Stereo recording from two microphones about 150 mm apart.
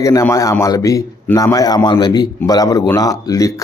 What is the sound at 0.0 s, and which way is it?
A man's voice, 20° left (ahead or behind).